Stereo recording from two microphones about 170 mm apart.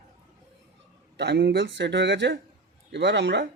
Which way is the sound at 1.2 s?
80° right.